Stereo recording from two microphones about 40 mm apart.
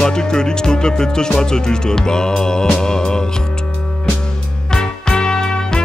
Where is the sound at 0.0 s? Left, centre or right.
Centre.